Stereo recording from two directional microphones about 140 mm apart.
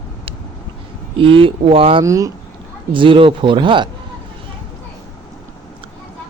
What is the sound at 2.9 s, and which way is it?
A man's voice, 40° right (ahead or behind).